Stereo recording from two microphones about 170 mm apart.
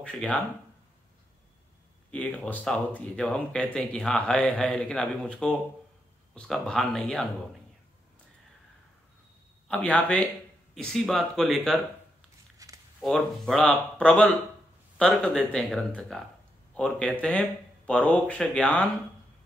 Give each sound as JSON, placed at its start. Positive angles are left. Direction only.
{"t": 0.0, "sound": "speech", "side_deg": 5}
{"t": 2.0, "sound": "speech", "side_deg": 5}
{"t": 9.7, "sound": "speech", "side_deg": 10}
{"t": 12.5, "sound": "a sound", "side_deg": -20}
{"t": 13.0, "sound": "speech", "side_deg": 0}